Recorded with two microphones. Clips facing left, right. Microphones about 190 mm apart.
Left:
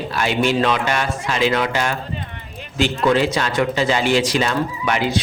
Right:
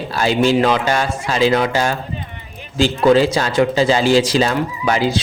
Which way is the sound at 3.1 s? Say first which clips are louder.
Right 5 dB; 35° right (ahead or behind).